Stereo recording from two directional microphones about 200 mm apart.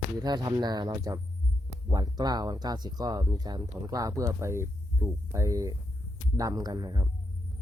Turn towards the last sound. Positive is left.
turn(degrees=-20)  # may be behind; listen again after turning